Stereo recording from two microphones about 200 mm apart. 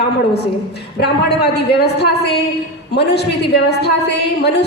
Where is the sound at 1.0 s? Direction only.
55° left (ahead or behind).